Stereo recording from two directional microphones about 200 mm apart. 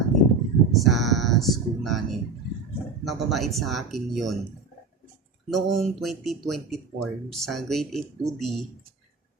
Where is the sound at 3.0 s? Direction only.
Centre (ahead or behind).